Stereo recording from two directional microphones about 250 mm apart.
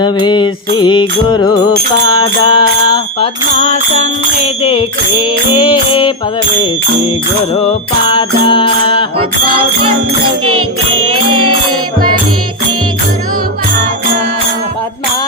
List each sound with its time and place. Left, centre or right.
0.0 s music: centre
8.0 s music: centre
11.2 s music: centre